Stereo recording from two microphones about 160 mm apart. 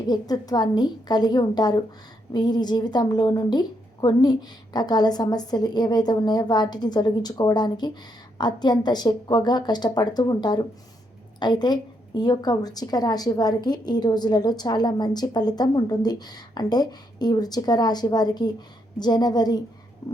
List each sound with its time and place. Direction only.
0.1 s a woman's voice: 25° left (ahead or behind)